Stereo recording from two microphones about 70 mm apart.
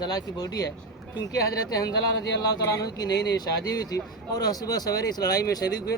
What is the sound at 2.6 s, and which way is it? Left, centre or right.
Speech, left.